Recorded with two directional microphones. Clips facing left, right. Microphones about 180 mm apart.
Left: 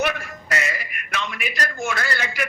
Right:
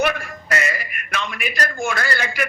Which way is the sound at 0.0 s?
55° right (ahead or behind).